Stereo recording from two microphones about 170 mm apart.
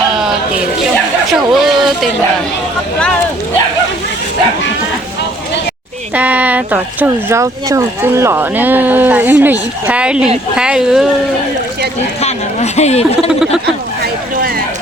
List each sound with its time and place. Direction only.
1.3 s speech: centre (ahead or behind)
6.1 s speech: 10° right (ahead or behind)
12.2 s speech: 40° left (ahead or behind)